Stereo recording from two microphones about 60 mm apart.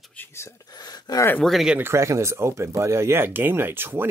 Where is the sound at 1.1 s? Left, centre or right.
Left.